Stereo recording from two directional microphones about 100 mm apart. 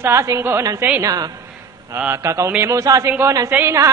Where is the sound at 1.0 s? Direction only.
40° right (ahead or behind).